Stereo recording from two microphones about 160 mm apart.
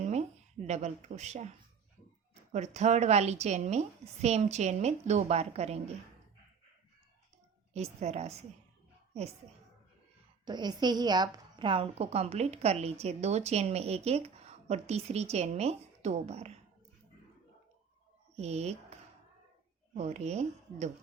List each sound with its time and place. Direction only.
0.0 s a sound: 45° right (ahead or behind)
0.7 s a woman's voice: 45° right (ahead or behind)
8.0 s a woman's voice: 45° right (ahead or behind)
10.4 s a woman's voice: 25° right (ahead or behind); by 16.6 s 40° right (ahead or behind)
18.3 s a woman's voice: 40° right (ahead or behind)